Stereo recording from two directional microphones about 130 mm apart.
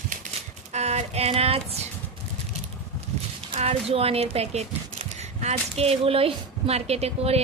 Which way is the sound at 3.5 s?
50° right (ahead or behind).